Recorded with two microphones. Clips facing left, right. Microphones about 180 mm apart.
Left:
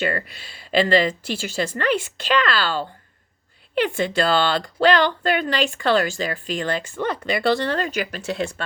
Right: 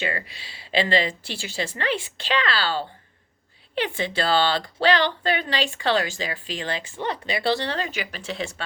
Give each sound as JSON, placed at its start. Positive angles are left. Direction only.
{"t": 0.0, "sound": "speech", "side_deg": 50}